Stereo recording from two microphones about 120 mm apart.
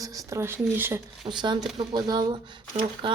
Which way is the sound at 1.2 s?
40° right (ahead or behind).